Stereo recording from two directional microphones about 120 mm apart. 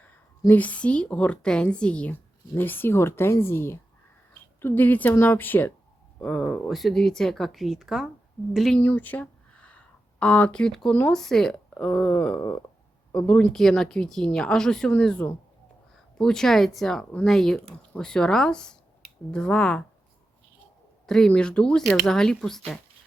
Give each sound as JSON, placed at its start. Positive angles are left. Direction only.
{"t": 0.0, "sound": "a woman's voice", "side_deg": 15}
{"t": 6.1, "sound": "speech", "side_deg": 5}
{"t": 8.8, "sound": "speech", "side_deg": 15}
{"t": 21.1, "sound": "speech", "side_deg": 5}